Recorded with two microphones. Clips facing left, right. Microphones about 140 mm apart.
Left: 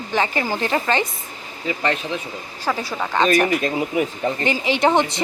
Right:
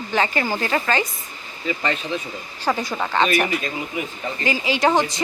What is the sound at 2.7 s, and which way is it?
Speech, 10° right (ahead or behind).